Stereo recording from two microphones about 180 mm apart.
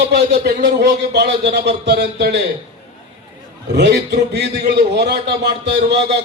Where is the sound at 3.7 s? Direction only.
70° right (ahead or behind).